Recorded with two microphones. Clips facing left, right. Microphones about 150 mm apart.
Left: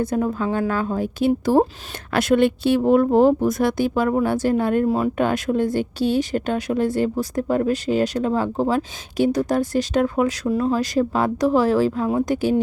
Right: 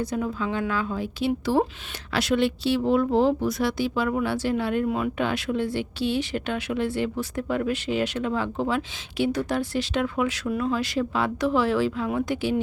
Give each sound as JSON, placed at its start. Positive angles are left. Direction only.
{"t": 0.0, "sound": "speech", "side_deg": 50}
{"t": 5.1, "sound": "a woman's voice", "side_deg": 45}